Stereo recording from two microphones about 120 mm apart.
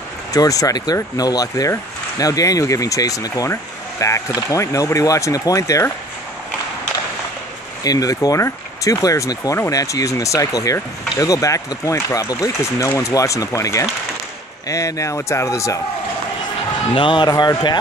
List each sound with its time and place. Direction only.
0.3 s speech: 30° left (ahead or behind)
7.8 s speech: 30° left (ahead or behind)
16.9 s speech: 45° left (ahead or behind)